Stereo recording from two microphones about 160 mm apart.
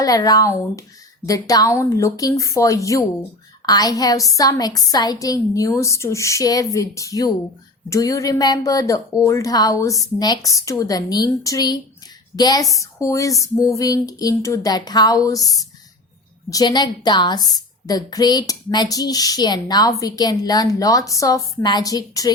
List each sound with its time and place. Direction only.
0.0 s a woman's voice: 25° left (ahead or behind)